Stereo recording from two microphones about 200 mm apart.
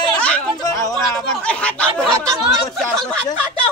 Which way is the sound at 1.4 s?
5° left (ahead or behind).